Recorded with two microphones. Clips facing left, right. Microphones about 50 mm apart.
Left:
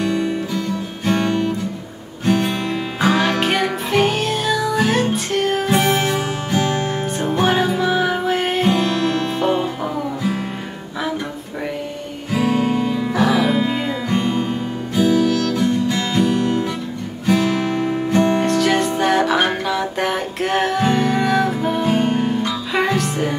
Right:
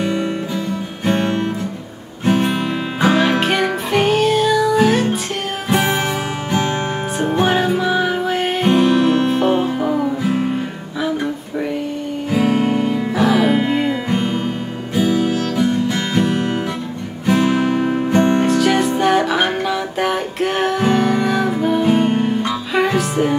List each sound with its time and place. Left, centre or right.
0.0 s music: centre
1.0 s music: right
3.3 s music: centre
5.7 s music: centre
7.2 s music: centre
7.4 s music: centre
8.6 s music: centre
9.6 s music: centre
12.4 s music: right
13.1 s music: centre
13.5 s music: right
18.4 s music: centre
21.8 s music: right
22.8 s music: centre